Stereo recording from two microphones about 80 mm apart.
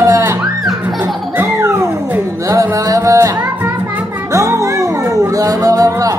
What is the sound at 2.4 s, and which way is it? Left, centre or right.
Music, right.